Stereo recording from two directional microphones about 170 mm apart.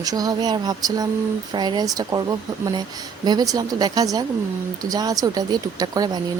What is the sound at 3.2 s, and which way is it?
Speech, 20° right (ahead or behind).